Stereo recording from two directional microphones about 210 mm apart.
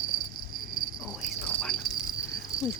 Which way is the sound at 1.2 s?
Centre (ahead or behind).